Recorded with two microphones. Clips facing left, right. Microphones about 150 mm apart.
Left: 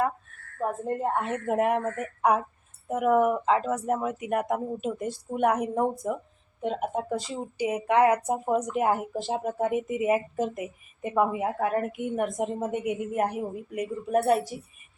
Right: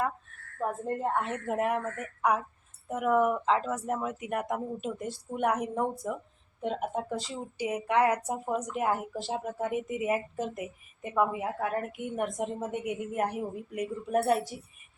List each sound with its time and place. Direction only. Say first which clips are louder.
0.6 s speech: left 3 dB; 15° left (ahead or behind)